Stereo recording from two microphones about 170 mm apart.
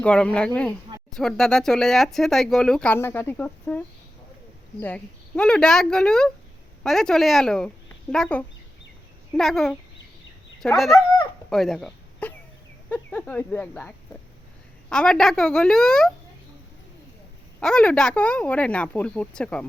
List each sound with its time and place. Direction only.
0.0 s speech: 5° left (ahead or behind)
10.9 s dog: 20° left (ahead or behind)
11.4 s a sound: centre (ahead or behind)
12.9 s speech: 10° left (ahead or behind)
17.6 s speech: 5° left (ahead or behind)